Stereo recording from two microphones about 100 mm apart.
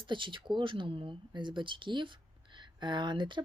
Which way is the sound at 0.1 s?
55° right (ahead or behind).